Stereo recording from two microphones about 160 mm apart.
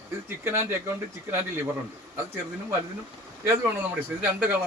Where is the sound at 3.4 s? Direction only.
15° right (ahead or behind).